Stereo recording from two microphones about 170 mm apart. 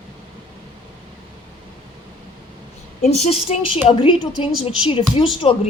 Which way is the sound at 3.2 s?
40° left (ahead or behind).